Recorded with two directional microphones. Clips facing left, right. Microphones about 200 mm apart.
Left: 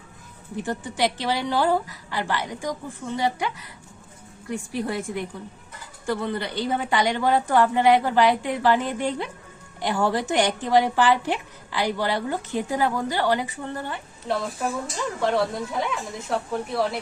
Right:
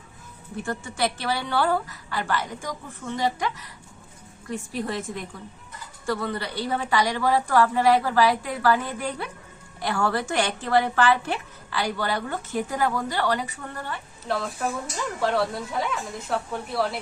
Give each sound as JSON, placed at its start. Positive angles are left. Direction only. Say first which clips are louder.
{"t": 0.5, "sound": "a woman's voice", "louder": "left 2 dB", "side_deg": 20}
{"t": 14.3, "sound": "a woman's voice", "louder": "left 1 dB", "side_deg": 0}